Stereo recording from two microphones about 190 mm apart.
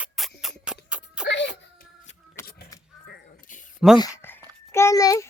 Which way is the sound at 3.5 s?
45° left (ahead or behind).